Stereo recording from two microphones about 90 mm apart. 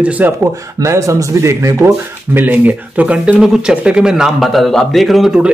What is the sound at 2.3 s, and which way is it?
A man's voice, 20° right (ahead or behind).